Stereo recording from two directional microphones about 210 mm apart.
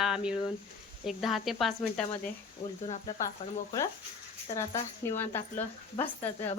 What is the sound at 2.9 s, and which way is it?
Speech, 35° left (ahead or behind).